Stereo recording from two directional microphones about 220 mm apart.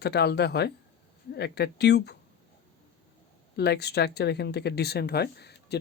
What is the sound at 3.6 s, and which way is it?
Speech, 50° left (ahead or behind).